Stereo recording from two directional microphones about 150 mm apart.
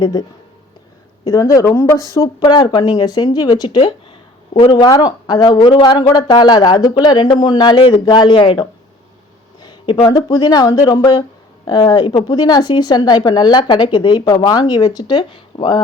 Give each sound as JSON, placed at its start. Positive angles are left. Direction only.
{"t": 0.0, "sound": "speech", "side_deg": 30}